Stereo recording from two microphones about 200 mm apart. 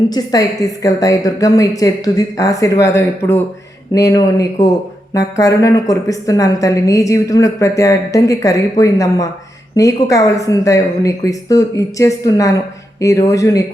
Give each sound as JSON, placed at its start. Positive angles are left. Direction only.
{"t": 0.1, "sound": "a woman's voice", "side_deg": 20}